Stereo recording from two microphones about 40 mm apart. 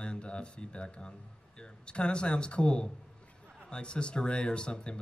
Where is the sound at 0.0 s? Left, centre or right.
Left.